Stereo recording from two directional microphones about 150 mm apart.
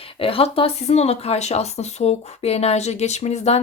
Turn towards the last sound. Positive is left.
turn(degrees=45)  # may be behind; listen again after turning